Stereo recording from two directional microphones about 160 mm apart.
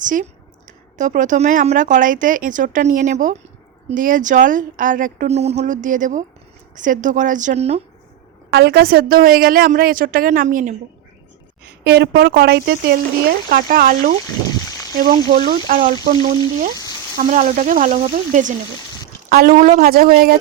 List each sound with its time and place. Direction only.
0.0 s speech: 55° right (ahead or behind)
8.4 s a woman's voice: 90° right; by 10.8 s 50° right (ahead or behind)
11.8 s a woman's voice: 90° right; by 14.1 s 60° right (ahead or behind)
14.6 s a sound: 25° left (ahead or behind)
15.4 s a woman's voice: 60° right (ahead or behind)
17.2 s a woman's voice: 50° right (ahead or behind)
19.3 s a woman's voice: 70° right (ahead or behind)